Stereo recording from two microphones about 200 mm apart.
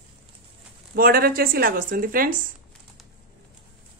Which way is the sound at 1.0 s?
50° right (ahead or behind).